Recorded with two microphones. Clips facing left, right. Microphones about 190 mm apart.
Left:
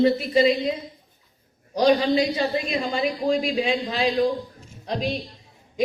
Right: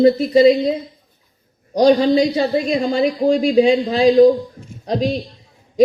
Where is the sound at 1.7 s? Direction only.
40° right (ahead or behind).